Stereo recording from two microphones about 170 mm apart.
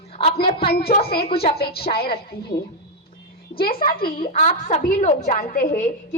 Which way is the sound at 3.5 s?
60° left (ahead or behind).